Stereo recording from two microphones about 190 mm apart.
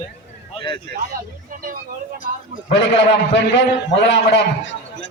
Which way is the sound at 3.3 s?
70° left (ahead or behind).